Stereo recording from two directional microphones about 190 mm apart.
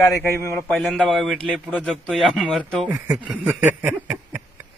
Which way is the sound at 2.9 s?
15° right (ahead or behind).